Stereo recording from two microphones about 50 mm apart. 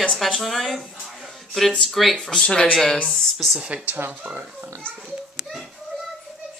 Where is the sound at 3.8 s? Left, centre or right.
Right.